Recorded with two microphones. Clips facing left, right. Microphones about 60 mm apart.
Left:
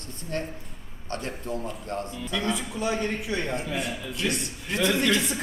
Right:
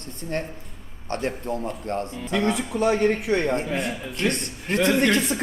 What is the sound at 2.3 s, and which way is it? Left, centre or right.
A man's voice, right.